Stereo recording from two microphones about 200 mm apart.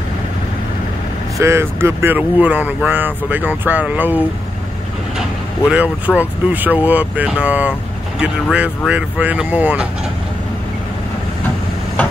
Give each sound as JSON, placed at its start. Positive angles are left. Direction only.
{"t": 1.4, "sound": "speech", "side_deg": -10}
{"t": 5.7, "sound": "speech", "side_deg": -5}